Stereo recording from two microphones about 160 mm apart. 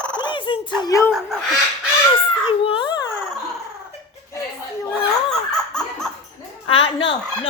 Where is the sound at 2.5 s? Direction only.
30° left (ahead or behind).